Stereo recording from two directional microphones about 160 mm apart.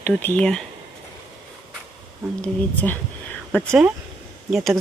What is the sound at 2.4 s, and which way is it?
Speech, 10° left (ahead or behind).